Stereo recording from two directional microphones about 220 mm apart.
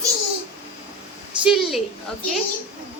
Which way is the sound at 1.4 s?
Centre (ahead or behind).